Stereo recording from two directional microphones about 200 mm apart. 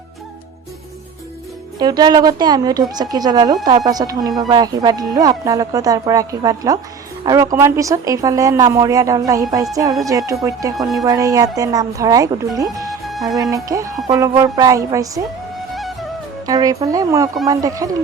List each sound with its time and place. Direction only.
1.8 s a woman's voice: 20° right (ahead or behind)
10.8 s speech: centre (ahead or behind)
11.0 s speech: 15° right (ahead or behind)
13.1 s music: centre (ahead or behind)
13.5 s speech: 15° right (ahead or behind)
15.7 s music: centre (ahead or behind)
16.5 s speech: 20° right (ahead or behind)